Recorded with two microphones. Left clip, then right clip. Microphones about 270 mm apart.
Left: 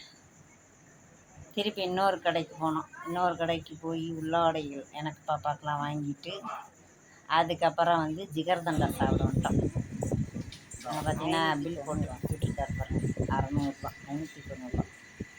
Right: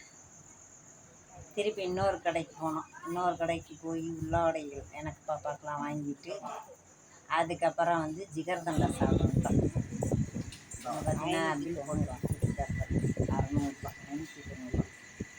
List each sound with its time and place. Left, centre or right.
1.5 s speech: centre
8.7 s speech: centre
9.5 s a sound: centre
11.6 s goat: centre